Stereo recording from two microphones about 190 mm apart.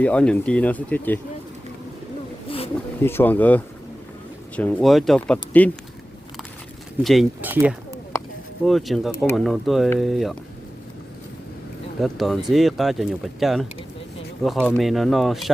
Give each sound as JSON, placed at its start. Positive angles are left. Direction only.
{"t": 0.0, "sound": "speech", "side_deg": 5}
{"t": 2.5, "sound": "snake", "side_deg": 30}
{"t": 3.0, "sound": "speech", "side_deg": 10}
{"t": 7.0, "sound": "speech", "side_deg": 0}
{"t": 7.4, "sound": "speech", "side_deg": -10}
{"t": 11.9, "sound": "speech", "side_deg": 0}
{"t": 14.7, "sound": "speech", "side_deg": 0}